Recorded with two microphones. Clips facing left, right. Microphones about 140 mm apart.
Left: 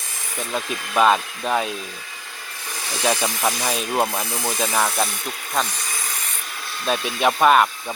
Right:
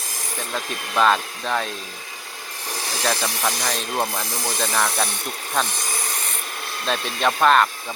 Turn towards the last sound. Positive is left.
turn(degrees=10)  # may be behind; listen again after turning